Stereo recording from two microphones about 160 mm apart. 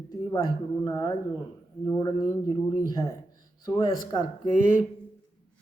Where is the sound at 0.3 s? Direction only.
25° left (ahead or behind).